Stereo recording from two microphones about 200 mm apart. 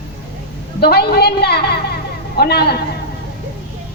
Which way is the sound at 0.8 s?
50° left (ahead or behind).